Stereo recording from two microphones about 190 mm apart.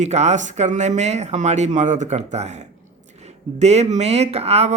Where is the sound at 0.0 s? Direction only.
35° right (ahead or behind).